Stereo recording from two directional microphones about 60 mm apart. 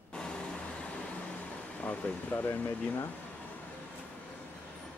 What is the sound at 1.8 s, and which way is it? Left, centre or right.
Speech, left.